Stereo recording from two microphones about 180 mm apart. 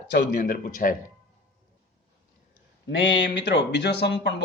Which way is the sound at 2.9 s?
90° left.